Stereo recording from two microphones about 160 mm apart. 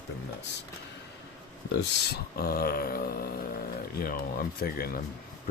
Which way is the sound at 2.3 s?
70° left (ahead or behind).